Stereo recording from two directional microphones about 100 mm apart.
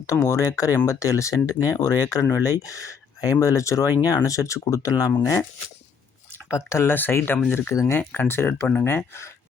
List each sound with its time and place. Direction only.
0.0 s speech: 30° left (ahead or behind)
6.5 s speech: 30° left (ahead or behind)
7.7 s speech: 30° left (ahead or behind)
7.9 s speech: 20° left (ahead or behind)